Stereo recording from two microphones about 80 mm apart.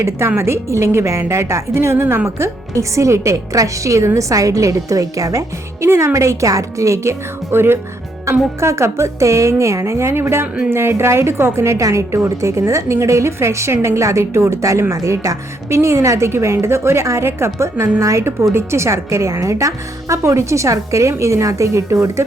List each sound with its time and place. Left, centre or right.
0.0 s a woman's voice: right